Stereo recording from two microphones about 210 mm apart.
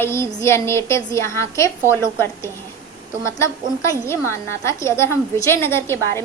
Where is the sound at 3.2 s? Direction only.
15° left (ahead or behind).